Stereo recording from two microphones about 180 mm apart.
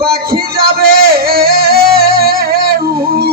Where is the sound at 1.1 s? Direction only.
55° right (ahead or behind).